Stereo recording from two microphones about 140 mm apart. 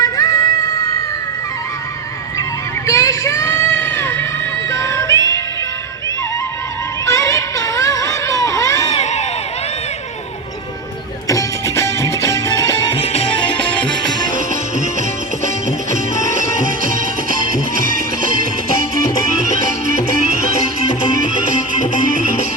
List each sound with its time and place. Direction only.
0.0 s music: 25° left (ahead or behind)
2.8 s a sound: 20° left (ahead or behind)
4.7 s crowd: 20° left (ahead or behind)
7.0 s a sound: 25° left (ahead or behind)
9.0 s crowd: 55° left (ahead or behind)
11.3 s music: 20° left (ahead or behind)
13.0 s music: 45° left (ahead or behind)
21.8 s music: 65° left (ahead or behind)